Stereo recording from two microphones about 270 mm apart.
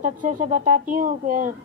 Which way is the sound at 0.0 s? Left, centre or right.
Right.